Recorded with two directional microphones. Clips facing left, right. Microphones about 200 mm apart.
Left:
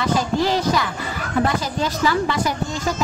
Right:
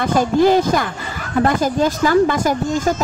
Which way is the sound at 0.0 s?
50° right (ahead or behind).